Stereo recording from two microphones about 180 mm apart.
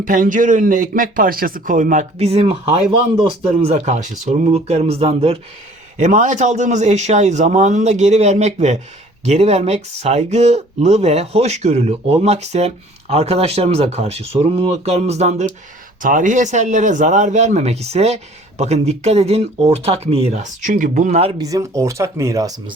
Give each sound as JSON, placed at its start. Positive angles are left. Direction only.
{"t": 0.0, "sound": "speech", "side_deg": -45}
{"t": 21.4, "sound": "speech", "side_deg": -20}